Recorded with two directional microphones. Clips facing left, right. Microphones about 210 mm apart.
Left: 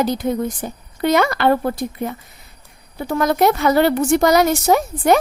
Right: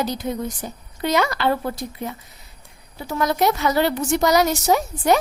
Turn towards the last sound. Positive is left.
turn(degrees=55)  # may be behind; listen again after turning